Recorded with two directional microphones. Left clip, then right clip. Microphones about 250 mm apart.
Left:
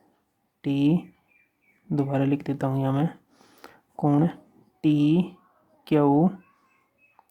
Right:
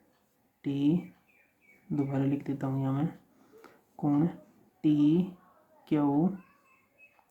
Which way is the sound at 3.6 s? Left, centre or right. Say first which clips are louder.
Left 9 dB; left.